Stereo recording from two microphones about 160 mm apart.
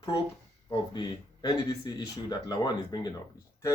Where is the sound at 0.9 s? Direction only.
25° left (ahead or behind).